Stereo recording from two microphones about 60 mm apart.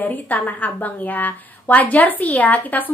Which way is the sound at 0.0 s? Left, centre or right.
Left.